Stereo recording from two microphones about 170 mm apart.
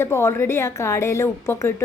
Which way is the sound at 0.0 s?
15° left (ahead or behind).